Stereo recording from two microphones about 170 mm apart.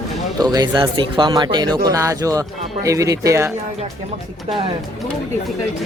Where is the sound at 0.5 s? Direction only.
25° right (ahead or behind).